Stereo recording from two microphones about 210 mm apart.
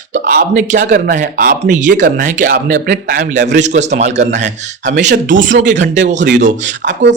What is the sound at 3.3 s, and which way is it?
A man's voice, 35° right (ahead or behind).